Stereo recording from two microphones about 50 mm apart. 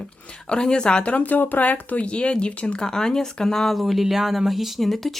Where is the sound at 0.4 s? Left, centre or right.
Centre.